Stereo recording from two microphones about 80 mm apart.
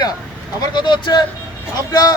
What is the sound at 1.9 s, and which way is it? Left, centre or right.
Speech, left.